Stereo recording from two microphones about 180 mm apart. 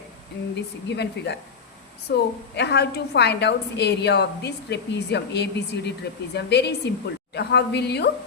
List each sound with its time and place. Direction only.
0.5 s a woman's voice: 70° left (ahead or behind)